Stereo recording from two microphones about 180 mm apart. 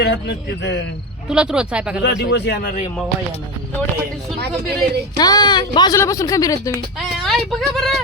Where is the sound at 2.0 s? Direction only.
70° left (ahead or behind).